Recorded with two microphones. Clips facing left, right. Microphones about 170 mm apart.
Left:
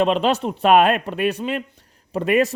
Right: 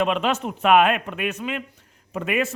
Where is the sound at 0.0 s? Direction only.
30° left (ahead or behind).